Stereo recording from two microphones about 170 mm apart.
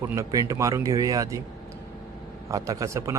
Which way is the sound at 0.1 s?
20° right (ahead or behind).